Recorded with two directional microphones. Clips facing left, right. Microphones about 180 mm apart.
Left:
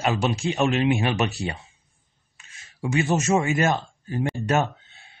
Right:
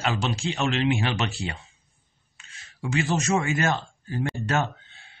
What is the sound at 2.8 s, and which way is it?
Speech, 20° left (ahead or behind).